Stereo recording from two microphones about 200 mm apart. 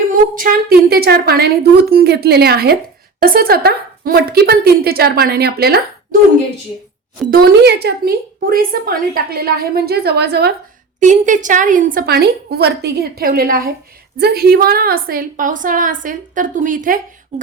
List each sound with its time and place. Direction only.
0.3 s a woman's voice: 45° right (ahead or behind)
7.3 s a woman's voice: 55° right (ahead or behind)
11.0 s a woman's voice: 40° right (ahead or behind)